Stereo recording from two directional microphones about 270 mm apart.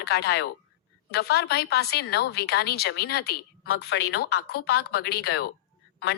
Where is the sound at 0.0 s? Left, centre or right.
Left.